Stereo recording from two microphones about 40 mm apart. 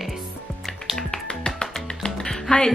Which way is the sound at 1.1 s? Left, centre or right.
Centre.